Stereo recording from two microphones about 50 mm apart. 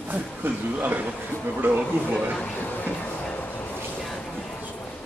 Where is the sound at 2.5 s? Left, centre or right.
Left.